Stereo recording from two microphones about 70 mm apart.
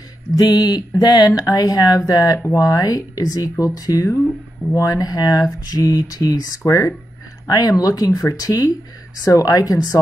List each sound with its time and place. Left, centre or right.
0.4 s speech: left
7.4 s speech: left